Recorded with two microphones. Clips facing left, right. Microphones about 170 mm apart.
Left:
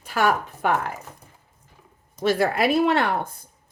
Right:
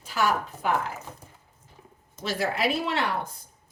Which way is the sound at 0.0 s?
55° left (ahead or behind).